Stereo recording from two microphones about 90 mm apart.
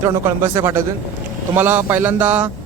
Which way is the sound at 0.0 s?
30° right (ahead or behind).